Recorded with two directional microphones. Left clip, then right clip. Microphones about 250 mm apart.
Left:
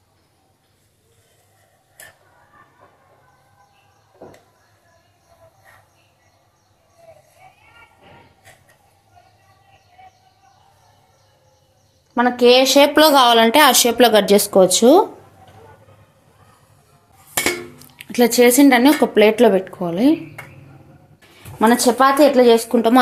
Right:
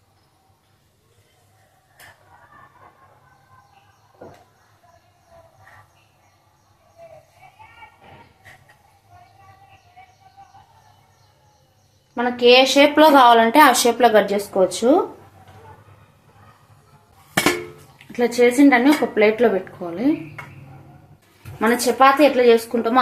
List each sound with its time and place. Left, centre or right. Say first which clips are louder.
12.1 s a woman's voice: left 1 dB; left
17.9 s a woman's voice: left 5 dB; left
21.6 s speech: left 1 dB; left